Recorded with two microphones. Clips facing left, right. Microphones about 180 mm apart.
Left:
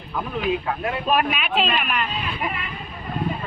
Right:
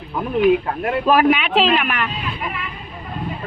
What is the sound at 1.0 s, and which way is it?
Speech, 75° right (ahead or behind).